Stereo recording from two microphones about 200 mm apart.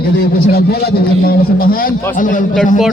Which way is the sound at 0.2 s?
50° left (ahead or behind).